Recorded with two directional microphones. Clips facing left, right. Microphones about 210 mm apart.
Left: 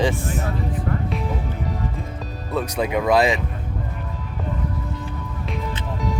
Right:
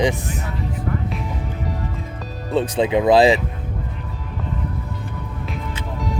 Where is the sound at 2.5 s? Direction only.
30° right (ahead or behind).